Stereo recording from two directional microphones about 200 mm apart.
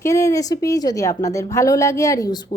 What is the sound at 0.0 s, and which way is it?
A woman's voice, 15° left (ahead or behind).